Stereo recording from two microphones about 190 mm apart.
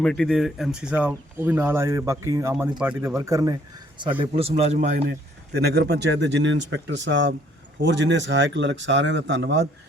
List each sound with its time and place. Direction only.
0.0 s speech: 5° left (ahead or behind); by 3.5 s 15° right (ahead or behind)
4.2 s a man's voice: 30° right (ahead or behind)
5.5 s speech: 55° right (ahead or behind)